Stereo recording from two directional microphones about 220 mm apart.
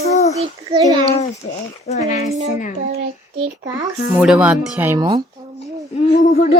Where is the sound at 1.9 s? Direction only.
30° left (ahead or behind).